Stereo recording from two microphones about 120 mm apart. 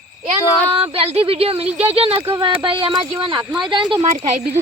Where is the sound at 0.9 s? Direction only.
55° right (ahead or behind).